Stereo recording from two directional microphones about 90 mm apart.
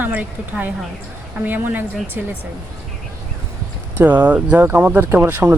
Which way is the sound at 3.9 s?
20° right (ahead or behind).